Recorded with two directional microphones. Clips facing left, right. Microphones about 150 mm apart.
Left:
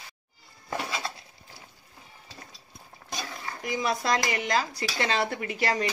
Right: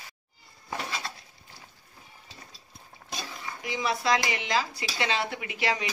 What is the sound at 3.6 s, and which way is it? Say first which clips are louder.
Speech: left 2 dB; 45° left (ahead or behind).